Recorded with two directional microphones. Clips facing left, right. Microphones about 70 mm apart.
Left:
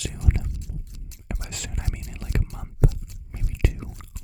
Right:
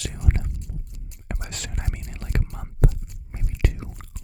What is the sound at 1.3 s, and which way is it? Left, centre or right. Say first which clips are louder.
Whispering: right 1 dB; right.